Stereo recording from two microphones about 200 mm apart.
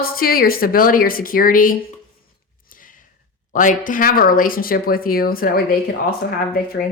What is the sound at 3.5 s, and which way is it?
Speech, 40° left (ahead or behind).